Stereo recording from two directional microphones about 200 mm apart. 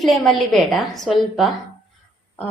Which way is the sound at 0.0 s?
Centre (ahead or behind).